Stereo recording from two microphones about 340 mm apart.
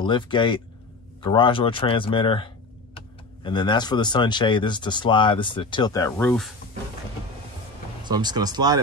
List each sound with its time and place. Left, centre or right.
0.0 s speech: centre
8.0 s speech: centre